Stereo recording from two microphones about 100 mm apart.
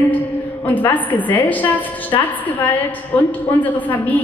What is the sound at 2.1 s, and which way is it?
Speech, 45° left (ahead or behind).